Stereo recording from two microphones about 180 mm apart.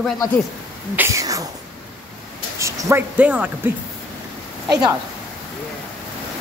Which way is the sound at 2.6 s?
15° right (ahead or behind).